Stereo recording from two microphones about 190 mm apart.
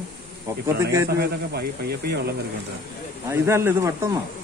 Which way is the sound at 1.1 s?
55° right (ahead or behind).